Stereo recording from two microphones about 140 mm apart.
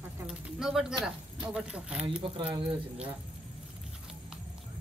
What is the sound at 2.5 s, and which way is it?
Speech, 35° right (ahead or behind).